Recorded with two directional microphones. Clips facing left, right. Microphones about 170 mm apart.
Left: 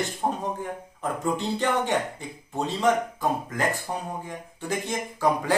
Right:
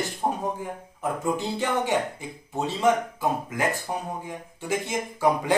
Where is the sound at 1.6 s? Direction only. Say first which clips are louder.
Even; 10° right (ahead or behind).